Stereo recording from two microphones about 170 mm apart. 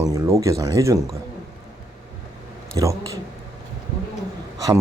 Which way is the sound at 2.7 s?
20° right (ahead or behind).